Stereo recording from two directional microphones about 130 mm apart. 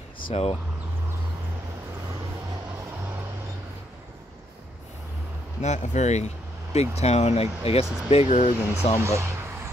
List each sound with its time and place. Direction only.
0.3 s speech: 45° left (ahead or behind)
5.6 s speech: 65° left (ahead or behind)
8.4 s speech: 65° left (ahead or behind)
9.0 s speech: 25° right (ahead or behind)